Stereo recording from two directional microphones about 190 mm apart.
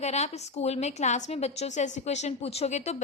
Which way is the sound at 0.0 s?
35° left (ahead or behind).